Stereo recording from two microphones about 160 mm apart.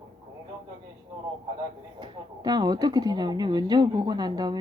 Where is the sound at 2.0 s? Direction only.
25° right (ahead or behind).